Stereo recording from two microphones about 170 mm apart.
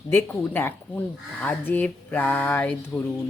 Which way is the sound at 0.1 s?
10° left (ahead or behind).